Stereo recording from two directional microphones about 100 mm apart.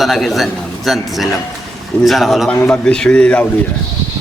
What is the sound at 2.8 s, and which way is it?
Speech, 10° left (ahead or behind).